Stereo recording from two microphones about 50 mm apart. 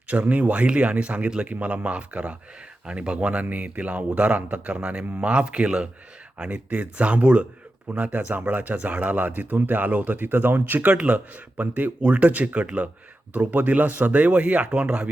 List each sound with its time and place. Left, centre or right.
0.1 s speech: right